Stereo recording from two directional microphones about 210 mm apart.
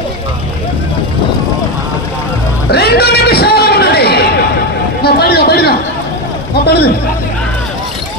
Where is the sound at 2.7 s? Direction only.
50° left (ahead or behind).